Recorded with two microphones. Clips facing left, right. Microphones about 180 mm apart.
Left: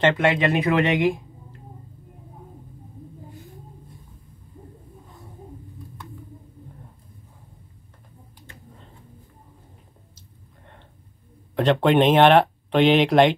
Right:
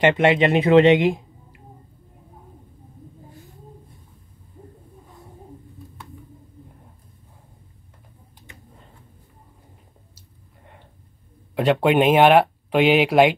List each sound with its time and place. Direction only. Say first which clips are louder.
0.0 s speech: right 3 dB; 20° right (ahead or behind)
11.5 s speech: even; 5° right (ahead or behind)